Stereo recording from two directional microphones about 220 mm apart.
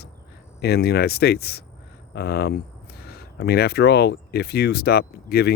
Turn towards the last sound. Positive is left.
turn(degrees=45)  # may be behind; listen again after turning